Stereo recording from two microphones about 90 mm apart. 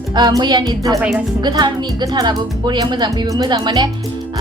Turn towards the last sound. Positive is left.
turn(degrees=-55)  # may be behind; listen again after turning